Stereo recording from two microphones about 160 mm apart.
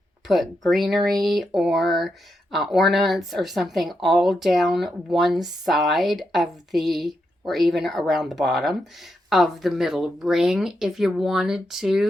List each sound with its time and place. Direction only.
0.3 s speech: centre (ahead or behind)